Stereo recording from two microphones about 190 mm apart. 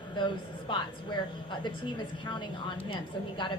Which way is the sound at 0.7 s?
25° left (ahead or behind).